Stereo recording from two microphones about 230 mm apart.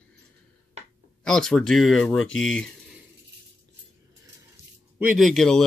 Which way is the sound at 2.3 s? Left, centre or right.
Left.